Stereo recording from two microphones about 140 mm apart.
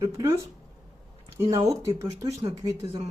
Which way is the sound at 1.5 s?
20° right (ahead or behind).